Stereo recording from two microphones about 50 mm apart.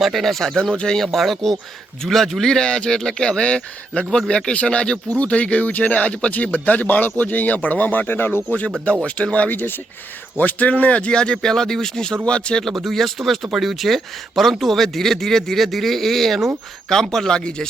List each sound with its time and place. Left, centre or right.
0.0 s a man's voice: centre; by 8.4 s left
8.4 s a man's voice: left
9.5 s speech: left
10.3 s speech: left
12.6 s speech: centre